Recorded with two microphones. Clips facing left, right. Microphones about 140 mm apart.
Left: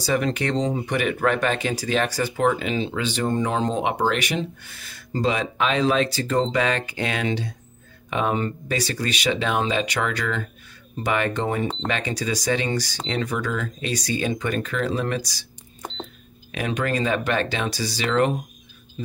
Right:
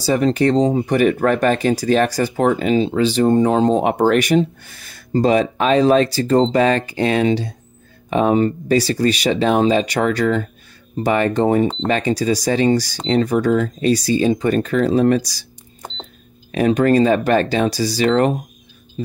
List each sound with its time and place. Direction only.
0.0 s speech: 35° right (ahead or behind)
3.9 s speech: 50° right (ahead or behind)